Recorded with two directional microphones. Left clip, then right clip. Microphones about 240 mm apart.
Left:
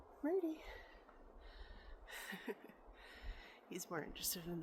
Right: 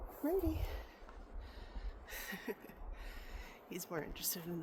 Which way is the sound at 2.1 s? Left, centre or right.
Centre.